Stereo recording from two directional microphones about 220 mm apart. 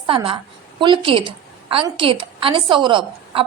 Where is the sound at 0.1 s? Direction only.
25° right (ahead or behind).